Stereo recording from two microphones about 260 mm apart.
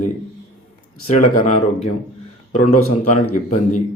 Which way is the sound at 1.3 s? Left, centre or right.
Left.